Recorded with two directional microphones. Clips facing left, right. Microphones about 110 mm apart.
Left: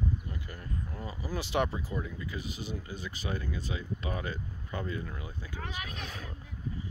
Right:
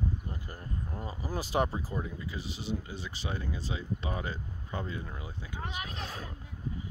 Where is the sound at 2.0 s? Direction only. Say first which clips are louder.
Even; 25° right (ahead or behind).